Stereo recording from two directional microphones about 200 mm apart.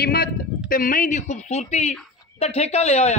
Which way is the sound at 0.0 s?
50° left (ahead or behind).